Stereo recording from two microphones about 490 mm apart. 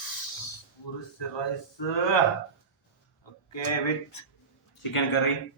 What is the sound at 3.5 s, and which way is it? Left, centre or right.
Speech, left.